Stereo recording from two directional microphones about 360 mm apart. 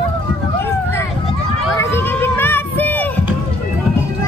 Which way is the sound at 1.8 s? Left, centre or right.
Centre.